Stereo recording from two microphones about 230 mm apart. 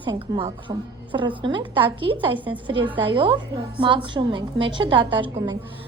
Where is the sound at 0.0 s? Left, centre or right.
Right.